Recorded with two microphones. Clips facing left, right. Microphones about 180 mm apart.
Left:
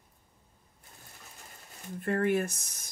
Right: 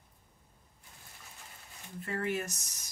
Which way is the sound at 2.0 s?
55° left (ahead or behind).